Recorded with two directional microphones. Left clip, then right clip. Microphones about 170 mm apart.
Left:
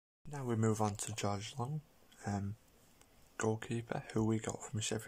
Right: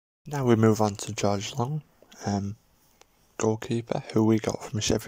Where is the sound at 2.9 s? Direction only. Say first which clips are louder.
Right 9 dB; 20° right (ahead or behind).